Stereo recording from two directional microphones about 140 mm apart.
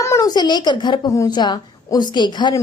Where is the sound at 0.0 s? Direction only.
20° left (ahead or behind).